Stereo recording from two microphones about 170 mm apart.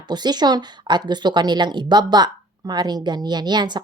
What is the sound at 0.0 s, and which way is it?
A woman's voice, 25° right (ahead or behind).